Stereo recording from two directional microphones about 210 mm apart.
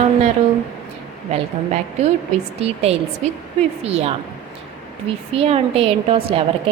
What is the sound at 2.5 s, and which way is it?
A woman's voice, 30° right (ahead or behind).